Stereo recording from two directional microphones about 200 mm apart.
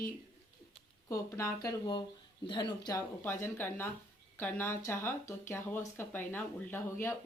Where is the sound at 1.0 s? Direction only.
15° left (ahead or behind).